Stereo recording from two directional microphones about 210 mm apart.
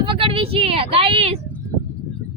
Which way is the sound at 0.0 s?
25° right (ahead or behind).